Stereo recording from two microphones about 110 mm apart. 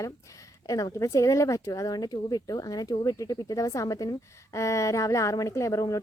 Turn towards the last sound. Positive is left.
turn(degrees=30)  # may be behind; listen again after turning